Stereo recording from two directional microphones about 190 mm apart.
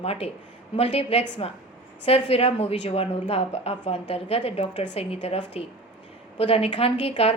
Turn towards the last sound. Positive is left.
turn(degrees=30)  # may be behind; listen again after turning